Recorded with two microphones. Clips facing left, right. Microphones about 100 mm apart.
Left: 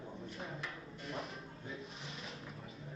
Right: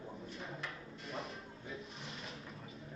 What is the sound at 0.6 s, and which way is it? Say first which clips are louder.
Music: left 1 dB; centre (ahead or behind).